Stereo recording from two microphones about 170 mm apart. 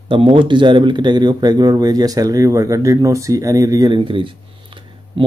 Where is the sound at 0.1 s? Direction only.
30° right (ahead or behind).